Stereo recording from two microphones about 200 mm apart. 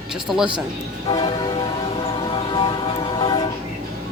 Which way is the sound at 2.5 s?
25° left (ahead or behind).